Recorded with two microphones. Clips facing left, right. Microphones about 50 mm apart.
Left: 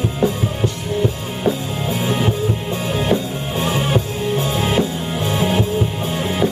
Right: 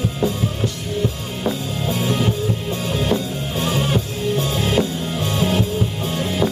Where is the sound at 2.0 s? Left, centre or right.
Centre.